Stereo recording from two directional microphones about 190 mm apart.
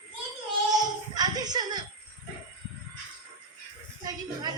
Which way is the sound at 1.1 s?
20° right (ahead or behind).